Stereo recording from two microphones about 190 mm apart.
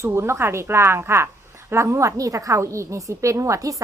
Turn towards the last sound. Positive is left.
turn(degrees=-15)  # may be behind; listen again after turning